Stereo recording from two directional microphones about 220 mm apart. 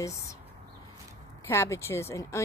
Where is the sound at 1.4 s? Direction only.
10° left (ahead or behind).